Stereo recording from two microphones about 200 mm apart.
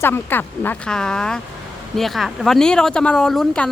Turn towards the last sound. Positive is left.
turn(degrees=5)  # may be behind; listen again after turning